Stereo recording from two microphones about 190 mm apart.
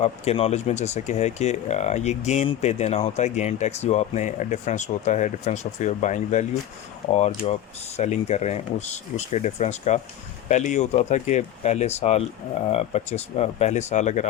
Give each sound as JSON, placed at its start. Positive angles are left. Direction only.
{"t": 0.0, "sound": "speech", "side_deg": 35}